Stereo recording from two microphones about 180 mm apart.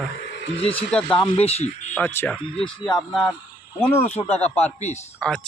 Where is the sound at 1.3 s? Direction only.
35° left (ahead or behind).